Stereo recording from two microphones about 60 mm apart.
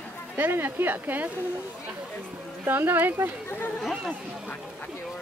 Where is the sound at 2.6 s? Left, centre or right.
Right.